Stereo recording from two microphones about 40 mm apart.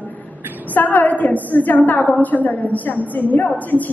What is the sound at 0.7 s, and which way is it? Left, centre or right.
A woman's voice, left.